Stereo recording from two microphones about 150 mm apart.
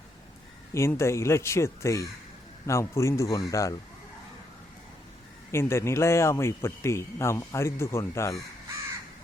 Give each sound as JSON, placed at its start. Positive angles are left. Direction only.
{"t": 0.7, "sound": "speech", "side_deg": 20}
{"t": 5.5, "sound": "speech", "side_deg": 15}